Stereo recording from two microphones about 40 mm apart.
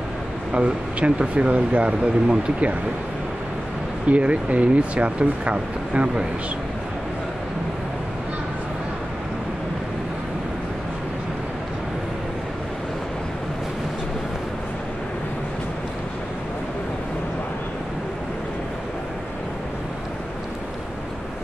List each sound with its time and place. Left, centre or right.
0.5 s speech: right
4.1 s speech: right